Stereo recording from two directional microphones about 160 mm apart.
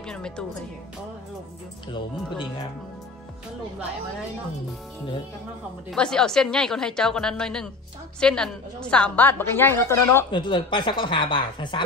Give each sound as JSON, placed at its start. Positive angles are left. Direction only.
{"t": 0.0, "sound": "a woman's voice", "side_deg": 5}
{"t": 5.9, "sound": "a woman's voice", "side_deg": 5}
{"t": 10.3, "sound": "speech", "side_deg": 30}